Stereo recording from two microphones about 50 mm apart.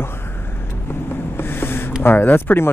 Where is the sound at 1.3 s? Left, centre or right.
Left.